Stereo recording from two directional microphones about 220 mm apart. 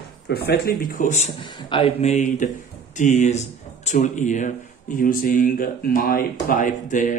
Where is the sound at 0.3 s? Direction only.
45° left (ahead or behind).